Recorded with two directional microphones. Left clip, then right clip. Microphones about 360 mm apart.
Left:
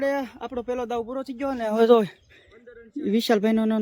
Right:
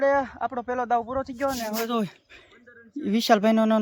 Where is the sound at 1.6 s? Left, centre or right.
Centre.